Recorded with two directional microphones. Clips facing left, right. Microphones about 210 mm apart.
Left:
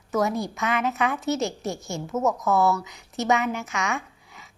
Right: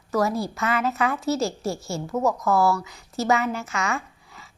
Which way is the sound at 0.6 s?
15° left (ahead or behind).